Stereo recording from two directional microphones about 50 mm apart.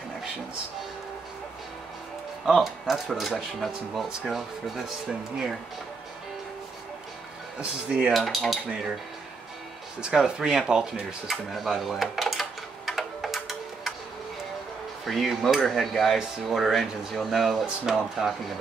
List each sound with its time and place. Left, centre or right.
2.4 s speech: centre
8.1 s speech: centre
10.0 s speech: centre
11.5 s a sound: centre
15.0 s speech: centre